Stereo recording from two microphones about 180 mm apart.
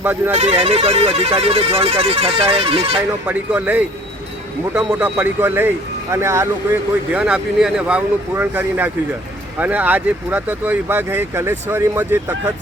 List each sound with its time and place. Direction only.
0.0 s speech: 10° right (ahead or behind)
0.3 s speech: 35° right (ahead or behind)
3.2 s speech: 10° right (ahead or behind)
4.9 s speech: 5° right (ahead or behind)